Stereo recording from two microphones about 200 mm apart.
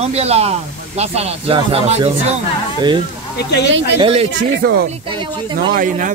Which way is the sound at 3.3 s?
55° left (ahead or behind).